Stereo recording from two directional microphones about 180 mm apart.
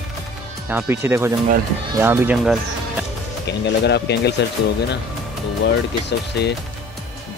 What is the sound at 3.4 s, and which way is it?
Speech, 70° left (ahead or behind).